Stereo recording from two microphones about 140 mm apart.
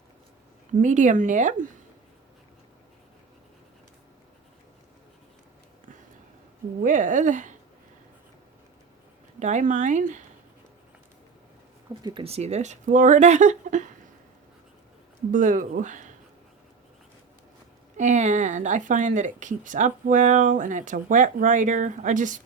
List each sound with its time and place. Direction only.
0.7 s speech: 65° right (ahead or behind)
6.8 s speech: 65° right (ahead or behind)
9.4 s speech: 60° right (ahead or behind)
12.0 s speech: 40° right (ahead or behind); by 13.9 s 60° right (ahead or behind)
15.3 s speech: 65° right (ahead or behind)
17.9 s speech: 55° right (ahead or behind)